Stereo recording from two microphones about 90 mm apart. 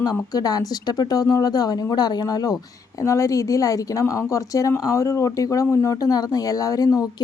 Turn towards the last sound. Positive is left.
turn(degrees=40)  # may be behind; listen again after turning